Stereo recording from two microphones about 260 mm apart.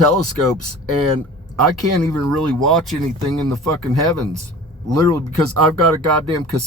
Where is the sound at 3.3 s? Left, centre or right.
Right.